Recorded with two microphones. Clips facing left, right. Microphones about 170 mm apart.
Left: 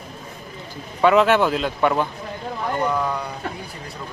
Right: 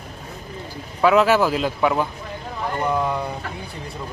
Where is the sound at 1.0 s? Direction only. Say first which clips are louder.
Even; centre (ahead or behind).